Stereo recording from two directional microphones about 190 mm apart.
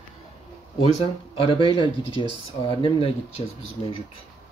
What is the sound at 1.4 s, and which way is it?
Speech, 25° left (ahead or behind).